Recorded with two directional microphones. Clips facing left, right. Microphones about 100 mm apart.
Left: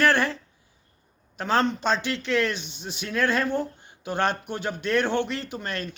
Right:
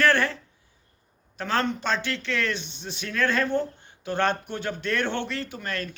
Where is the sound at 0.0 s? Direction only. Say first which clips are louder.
Even; 15° left (ahead or behind).